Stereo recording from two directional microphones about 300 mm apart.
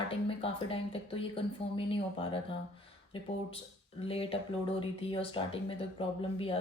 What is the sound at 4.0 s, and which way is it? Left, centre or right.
Speech, centre.